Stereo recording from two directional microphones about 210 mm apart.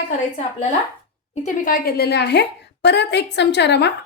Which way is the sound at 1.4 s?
40° left (ahead or behind).